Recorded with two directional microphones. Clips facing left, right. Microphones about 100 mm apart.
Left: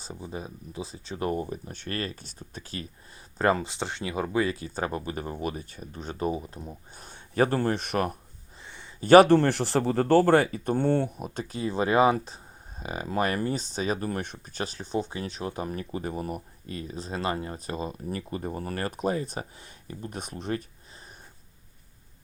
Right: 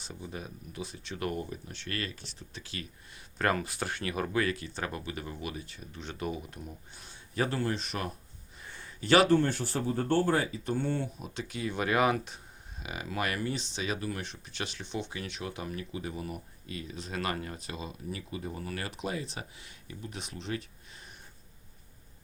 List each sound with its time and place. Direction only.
0.1 s speech: 25° left (ahead or behind)
1.7 s speech: 45° left (ahead or behind)
3.3 s speech: 25° left (ahead or behind); by 8.1 s 55° left (ahead or behind)
8.6 s a sound: 20° left (ahead or behind)
9.0 s speech: 45° left (ahead or behind)
9.3 s speech: 75° left (ahead or behind); by 11.4 s 55° left (ahead or behind)
11.4 s speech: 35° left (ahead or behind)
17.7 s speech: 45° left (ahead or behind)